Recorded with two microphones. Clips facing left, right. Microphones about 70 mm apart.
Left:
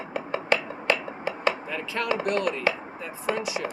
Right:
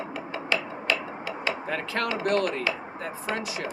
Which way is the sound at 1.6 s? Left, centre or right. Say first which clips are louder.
Even; right.